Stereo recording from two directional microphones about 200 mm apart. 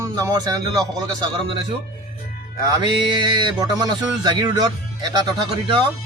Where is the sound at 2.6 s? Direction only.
20° right (ahead or behind).